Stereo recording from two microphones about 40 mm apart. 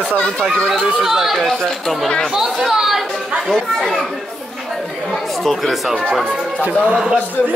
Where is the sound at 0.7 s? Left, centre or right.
Centre.